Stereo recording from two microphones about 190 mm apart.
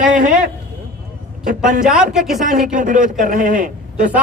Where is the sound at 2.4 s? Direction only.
45° right (ahead or behind).